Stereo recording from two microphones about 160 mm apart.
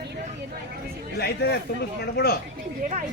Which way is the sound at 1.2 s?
90° left.